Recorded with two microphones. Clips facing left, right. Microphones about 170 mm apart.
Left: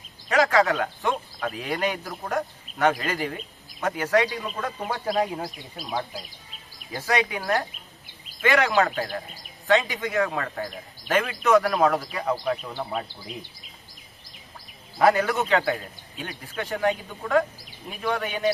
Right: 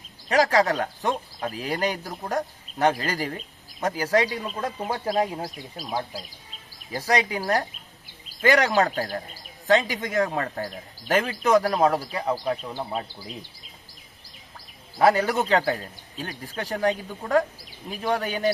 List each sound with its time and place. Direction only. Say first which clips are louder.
0.3 s a man's voice: even; 35° right (ahead or behind)
6.9 s a man's voice: right 1 dB; 35° right (ahead or behind)
14.9 s a man's voice: even; 30° right (ahead or behind)